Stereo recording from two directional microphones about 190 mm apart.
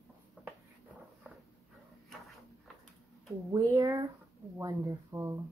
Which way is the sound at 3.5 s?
15° right (ahead or behind).